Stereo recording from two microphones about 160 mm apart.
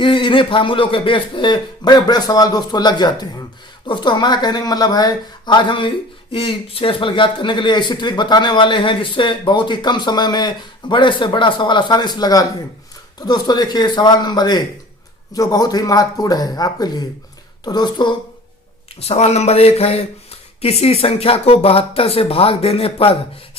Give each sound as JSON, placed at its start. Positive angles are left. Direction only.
{"t": 0.0, "sound": "a man's voice", "side_deg": 30}
{"t": 19.0, "sound": "speech", "side_deg": 40}